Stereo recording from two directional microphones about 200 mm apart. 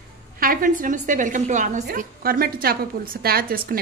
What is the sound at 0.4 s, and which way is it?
A woman's voice, 45° right (ahead or behind).